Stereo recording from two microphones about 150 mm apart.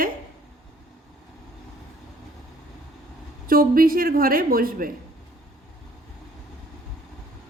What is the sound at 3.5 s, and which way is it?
Speech, 70° right (ahead or behind).